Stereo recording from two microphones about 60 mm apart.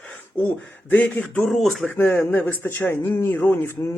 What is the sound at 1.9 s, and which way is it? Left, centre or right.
Speech, left.